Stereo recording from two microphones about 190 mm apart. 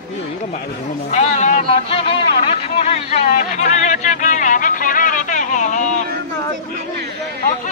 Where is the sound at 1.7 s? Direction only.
30° left (ahead or behind).